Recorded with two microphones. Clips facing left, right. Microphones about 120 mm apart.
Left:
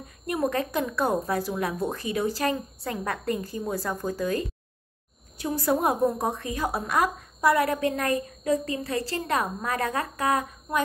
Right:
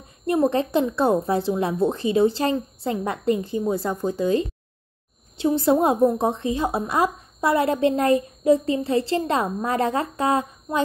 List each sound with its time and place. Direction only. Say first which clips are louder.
0.3 s a woman's voice: right 6 dB; 30° right (ahead or behind)